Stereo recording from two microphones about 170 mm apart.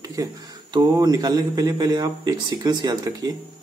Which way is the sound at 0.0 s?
20° right (ahead or behind).